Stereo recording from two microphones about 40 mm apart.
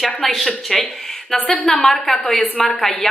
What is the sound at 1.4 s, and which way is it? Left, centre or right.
Speech, left.